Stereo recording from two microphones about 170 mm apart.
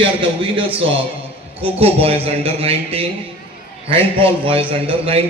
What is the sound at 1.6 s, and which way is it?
A man's voice, 35° right (ahead or behind).